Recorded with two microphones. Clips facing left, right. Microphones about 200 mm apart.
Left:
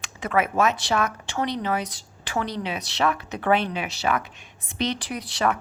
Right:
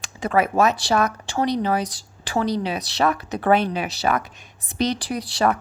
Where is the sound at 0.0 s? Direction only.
35° right (ahead or behind).